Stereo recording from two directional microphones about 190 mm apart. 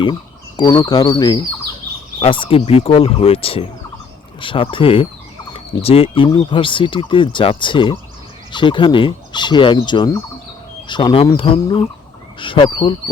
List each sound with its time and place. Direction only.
0.0 s fowl: 25° left (ahead or behind)
2.1 s speech: 25° left (ahead or behind)